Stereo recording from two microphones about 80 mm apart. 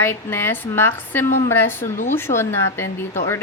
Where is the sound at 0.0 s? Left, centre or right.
Left.